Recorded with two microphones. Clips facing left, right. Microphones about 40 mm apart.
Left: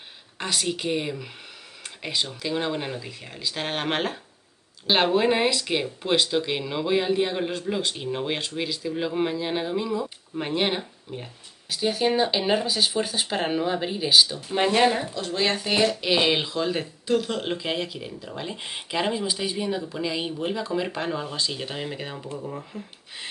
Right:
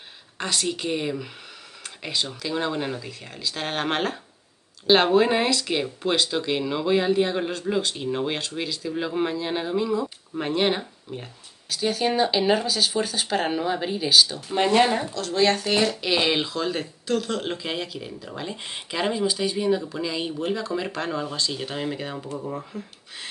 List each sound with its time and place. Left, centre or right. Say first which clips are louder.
0.4 s speech: right 1 dB; centre
2.4 s speech: right 2 dB; centre
22.7 s speech: right 2 dB; centre